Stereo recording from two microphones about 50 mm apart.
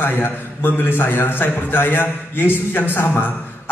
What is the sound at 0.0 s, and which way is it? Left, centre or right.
A man's voice, left.